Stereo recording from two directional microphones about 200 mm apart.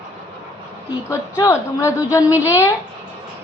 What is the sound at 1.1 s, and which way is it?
Speech, 15° left (ahead or behind).